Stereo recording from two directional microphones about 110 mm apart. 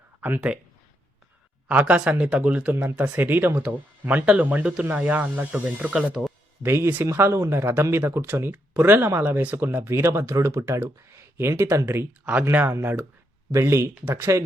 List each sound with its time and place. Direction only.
0.2 s speech: 15° right (ahead or behind)
1.6 s speech: 10° right (ahead or behind)
6.6 s speech: 20° right (ahead or behind)
12.2 s speech: 15° right (ahead or behind)